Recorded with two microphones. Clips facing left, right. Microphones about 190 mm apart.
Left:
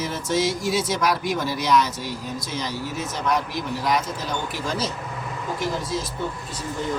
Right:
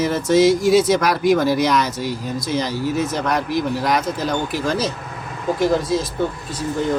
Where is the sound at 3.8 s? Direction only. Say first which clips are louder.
Right 4 dB; 80° right.